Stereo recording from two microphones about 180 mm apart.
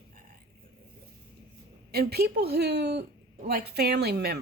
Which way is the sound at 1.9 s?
60° right (ahead or behind).